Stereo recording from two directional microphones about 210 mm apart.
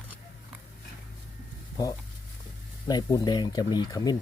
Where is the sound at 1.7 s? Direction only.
20° left (ahead or behind).